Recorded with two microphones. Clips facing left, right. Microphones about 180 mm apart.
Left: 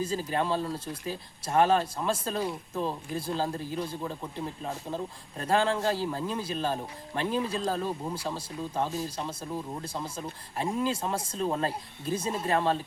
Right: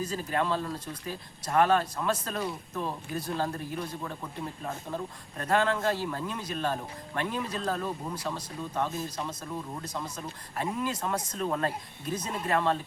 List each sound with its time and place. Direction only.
0.0 s speech: 25° left (ahead or behind)